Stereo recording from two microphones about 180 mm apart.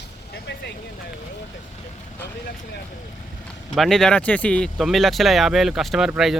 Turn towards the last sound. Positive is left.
turn(degrees=0)  # may be behind; listen again after turning